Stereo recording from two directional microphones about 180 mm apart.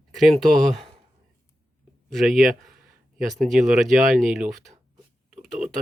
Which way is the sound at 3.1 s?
Centre (ahead or behind).